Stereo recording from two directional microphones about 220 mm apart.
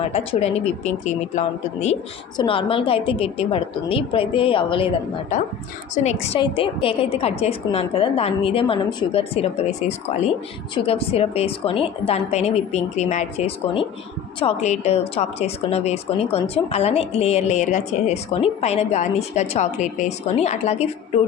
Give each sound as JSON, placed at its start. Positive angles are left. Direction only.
{"t": 0.1, "sound": "a woman's voice", "side_deg": 30}
{"t": 5.9, "sound": "a woman's voice", "side_deg": 30}
{"t": 10.8, "sound": "a woman's voice", "side_deg": 25}